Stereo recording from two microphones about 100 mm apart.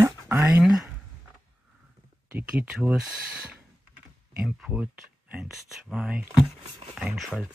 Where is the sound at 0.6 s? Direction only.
5° right (ahead or behind).